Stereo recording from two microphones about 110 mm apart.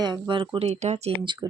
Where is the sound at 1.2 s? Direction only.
45° right (ahead or behind).